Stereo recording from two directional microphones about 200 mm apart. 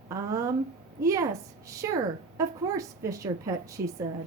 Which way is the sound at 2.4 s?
15° right (ahead or behind).